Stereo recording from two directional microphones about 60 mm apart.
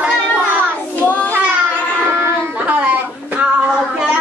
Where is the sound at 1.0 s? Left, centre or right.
Left.